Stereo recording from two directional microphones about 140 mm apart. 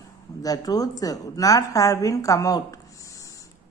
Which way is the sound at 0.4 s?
25° left (ahead or behind).